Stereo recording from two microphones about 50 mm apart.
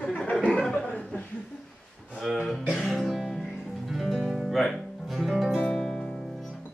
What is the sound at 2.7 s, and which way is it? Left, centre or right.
Music, centre.